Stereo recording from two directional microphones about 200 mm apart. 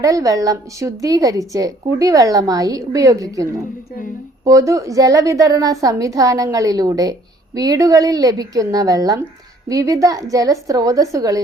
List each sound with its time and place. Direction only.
0.0 s a woman's voice: 15° right (ahead or behind)